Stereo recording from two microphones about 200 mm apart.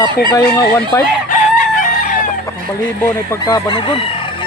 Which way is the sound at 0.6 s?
50° left (ahead or behind).